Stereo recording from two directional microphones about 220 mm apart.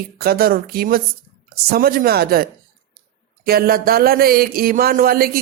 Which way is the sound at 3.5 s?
45° right (ahead or behind).